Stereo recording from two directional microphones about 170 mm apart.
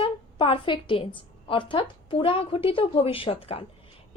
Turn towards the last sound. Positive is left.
turn(degrees=35)  # may be behind; listen again after turning